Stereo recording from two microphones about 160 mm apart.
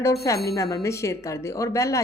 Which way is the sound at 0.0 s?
20° left (ahead or behind).